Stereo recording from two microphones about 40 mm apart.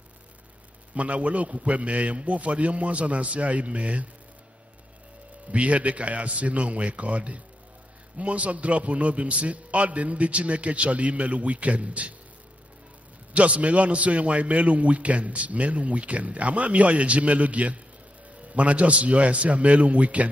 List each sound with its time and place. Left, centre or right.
0.9 s a man's voice: right
5.5 s a man's voice: right
13.3 s a man's voice: right